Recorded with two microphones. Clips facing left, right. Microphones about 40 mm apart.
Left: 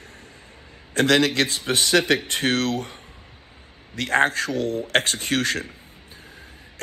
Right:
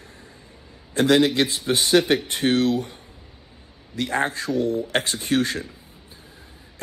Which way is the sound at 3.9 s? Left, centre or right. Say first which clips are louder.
Left 4 dB; left.